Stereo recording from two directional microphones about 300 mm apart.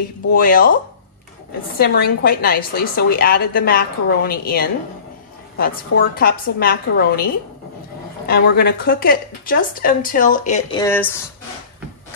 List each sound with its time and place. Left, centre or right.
0.3 s speech: left
1.8 s a woman's voice: left
8.3 s speech: left
10.8 s speech: centre